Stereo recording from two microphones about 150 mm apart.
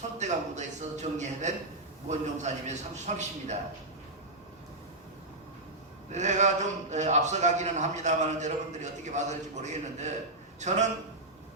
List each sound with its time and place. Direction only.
0.2 s a man's voice: 50° right (ahead or behind)
6.1 s a man's voice: 50° right (ahead or behind)